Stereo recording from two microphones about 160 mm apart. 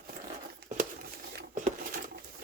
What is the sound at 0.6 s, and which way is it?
Crumpling, 85° right.